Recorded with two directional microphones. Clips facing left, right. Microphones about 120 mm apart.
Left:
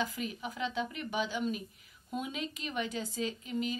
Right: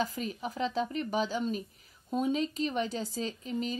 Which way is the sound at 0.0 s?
40° right (ahead or behind).